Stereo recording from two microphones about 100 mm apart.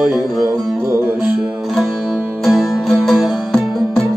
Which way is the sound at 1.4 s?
5° right (ahead or behind).